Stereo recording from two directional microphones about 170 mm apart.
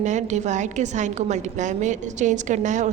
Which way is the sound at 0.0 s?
45° right (ahead or behind).